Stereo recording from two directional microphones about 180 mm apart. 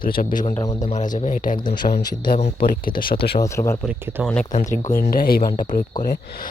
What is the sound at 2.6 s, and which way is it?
Speech, 50° left (ahead or behind).